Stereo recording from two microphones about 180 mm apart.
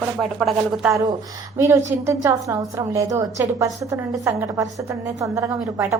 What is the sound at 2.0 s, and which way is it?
A woman's voice, 15° right (ahead or behind).